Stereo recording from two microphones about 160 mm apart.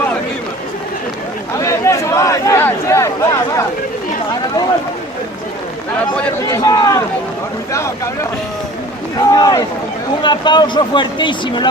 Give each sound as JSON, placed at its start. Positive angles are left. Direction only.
{"t": 1.5, "sound": "a sound", "side_deg": 20}
{"t": 6.5, "sound": "speech", "side_deg": 20}
{"t": 9.3, "sound": "speech", "side_deg": 25}